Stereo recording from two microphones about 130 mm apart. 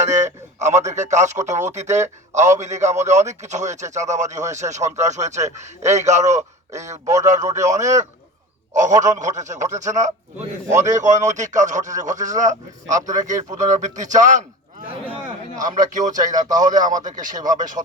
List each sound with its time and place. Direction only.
0.0 s a sound: 65° right (ahead or behind)
0.6 s a man's voice: 60° right (ahead or behind)
15.5 s speech: 75° right (ahead or behind)